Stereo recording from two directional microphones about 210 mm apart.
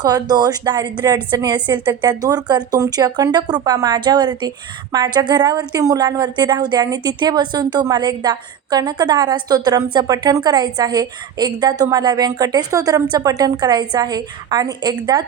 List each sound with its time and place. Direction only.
0.0 s a woman's voice: 20° right (ahead or behind)